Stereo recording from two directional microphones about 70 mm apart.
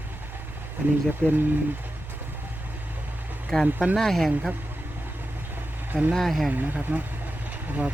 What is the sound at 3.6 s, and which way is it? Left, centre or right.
Speech, centre.